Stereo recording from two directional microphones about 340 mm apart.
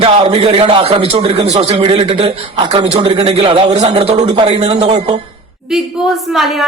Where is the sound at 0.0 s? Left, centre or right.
Centre.